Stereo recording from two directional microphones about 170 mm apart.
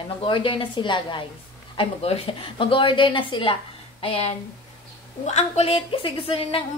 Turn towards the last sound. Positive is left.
turn(degrees=35)  # may be behind; listen again after turning